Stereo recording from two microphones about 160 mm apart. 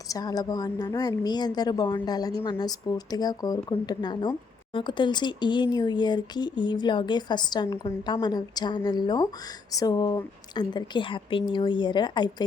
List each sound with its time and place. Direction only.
0.1 s a woman's voice: 25° left (ahead or behind)